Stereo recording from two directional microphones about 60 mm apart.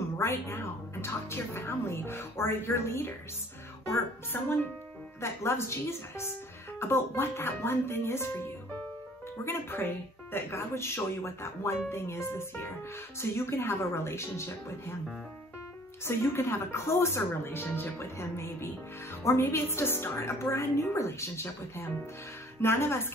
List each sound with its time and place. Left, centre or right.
0.2 s speech: left
4.3 s speech: left
5.2 s speech: left
9.4 s speech: left
16.1 s speech: left